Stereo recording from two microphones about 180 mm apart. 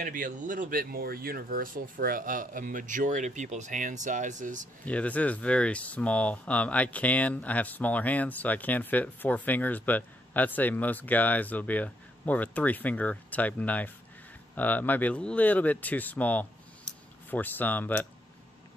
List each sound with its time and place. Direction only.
0.0 s speech: 45° right (ahead or behind)
4.8 s speech: 10° left (ahead or behind)